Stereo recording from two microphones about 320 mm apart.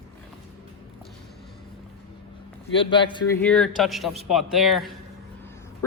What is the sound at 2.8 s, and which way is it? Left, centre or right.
A man's voice, centre.